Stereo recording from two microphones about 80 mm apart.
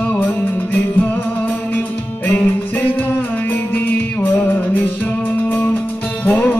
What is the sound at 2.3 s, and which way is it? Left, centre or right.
Music, centre.